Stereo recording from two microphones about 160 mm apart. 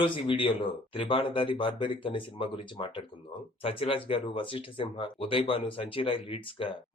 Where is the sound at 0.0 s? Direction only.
30° left (ahead or behind).